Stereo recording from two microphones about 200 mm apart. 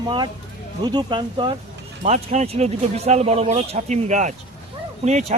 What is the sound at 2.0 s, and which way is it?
Speech, 35° right (ahead or behind).